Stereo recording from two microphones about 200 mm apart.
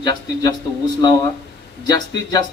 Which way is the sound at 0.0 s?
20° left (ahead or behind).